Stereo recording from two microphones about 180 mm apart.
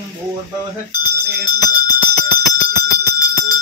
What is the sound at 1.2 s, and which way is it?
Speech, 20° left (ahead or behind).